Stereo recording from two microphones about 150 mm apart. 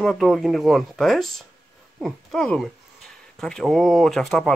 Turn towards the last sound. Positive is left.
turn(degrees=0)  # may be behind; listen again after turning